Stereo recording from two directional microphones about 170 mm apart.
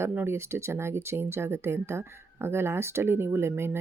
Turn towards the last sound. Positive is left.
turn(degrees=-15)  # may be behind; listen again after turning